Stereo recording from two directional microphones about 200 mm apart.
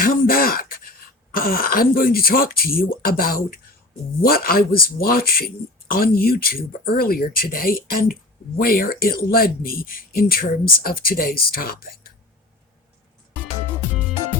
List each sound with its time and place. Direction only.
0.0 s speech: 45° left (ahead or behind)